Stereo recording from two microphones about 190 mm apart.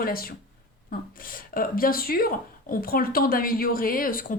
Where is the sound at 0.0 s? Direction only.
50° left (ahead or behind).